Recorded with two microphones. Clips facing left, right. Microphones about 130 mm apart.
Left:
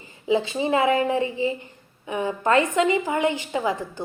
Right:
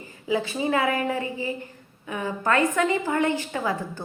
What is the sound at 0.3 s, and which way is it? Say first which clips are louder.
A woman's voice: left 3 dB; 25° left (ahead or behind).